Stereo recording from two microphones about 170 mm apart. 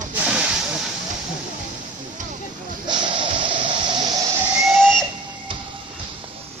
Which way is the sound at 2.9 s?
30° right (ahead or behind).